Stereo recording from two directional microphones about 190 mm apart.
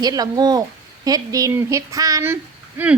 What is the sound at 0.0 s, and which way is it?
A woman's voice, 20° right (ahead or behind).